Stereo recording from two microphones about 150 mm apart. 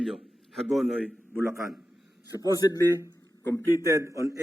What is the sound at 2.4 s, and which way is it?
A man's voice, 25° left (ahead or behind).